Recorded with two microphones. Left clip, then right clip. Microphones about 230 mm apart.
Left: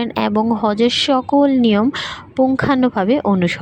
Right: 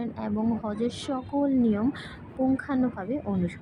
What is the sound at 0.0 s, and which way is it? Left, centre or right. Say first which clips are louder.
Speech: left 13 dB; left.